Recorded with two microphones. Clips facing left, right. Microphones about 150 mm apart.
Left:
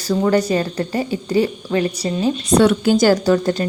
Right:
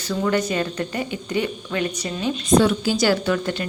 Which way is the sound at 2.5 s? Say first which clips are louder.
Left 4 dB; 65° left (ahead or behind).